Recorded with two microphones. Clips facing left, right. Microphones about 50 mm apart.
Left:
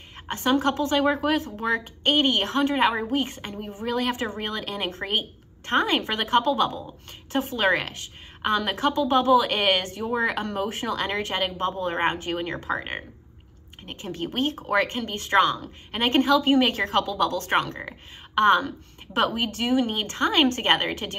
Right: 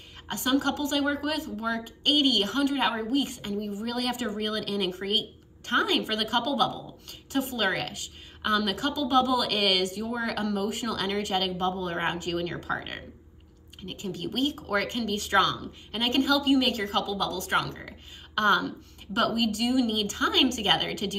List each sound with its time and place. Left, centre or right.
0.3 s a woman's voice: left